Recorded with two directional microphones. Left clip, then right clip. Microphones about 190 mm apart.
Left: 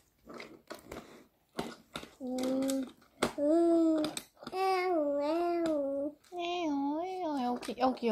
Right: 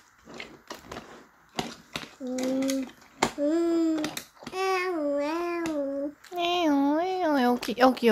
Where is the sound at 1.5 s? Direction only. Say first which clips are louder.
Right 7 dB; 10° right (ahead or behind).